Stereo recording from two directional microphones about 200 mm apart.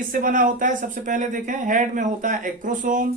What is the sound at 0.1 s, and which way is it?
Speech, 45° right (ahead or behind).